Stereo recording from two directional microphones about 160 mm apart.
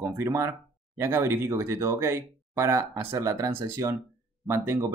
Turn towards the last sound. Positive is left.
turn(degrees=-15)  # may be behind; listen again after turning